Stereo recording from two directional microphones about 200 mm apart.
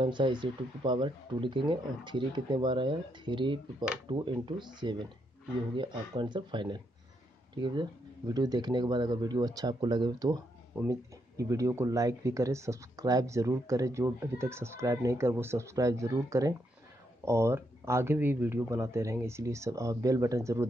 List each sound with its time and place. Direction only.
0.0 s speech: 25° right (ahead or behind)